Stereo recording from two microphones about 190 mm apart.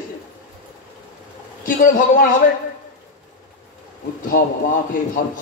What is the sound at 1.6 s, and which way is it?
Speech, 45° left (ahead or behind).